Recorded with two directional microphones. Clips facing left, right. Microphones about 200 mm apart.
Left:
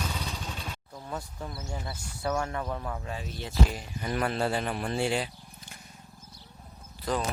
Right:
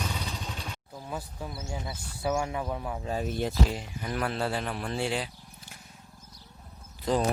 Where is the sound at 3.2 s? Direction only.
55° right (ahead or behind).